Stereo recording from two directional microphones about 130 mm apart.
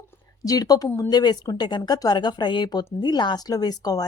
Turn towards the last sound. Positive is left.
turn(degrees=30)  # may be behind; listen again after turning